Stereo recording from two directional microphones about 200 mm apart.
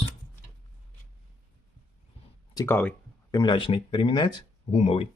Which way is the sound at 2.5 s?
10° left (ahead or behind).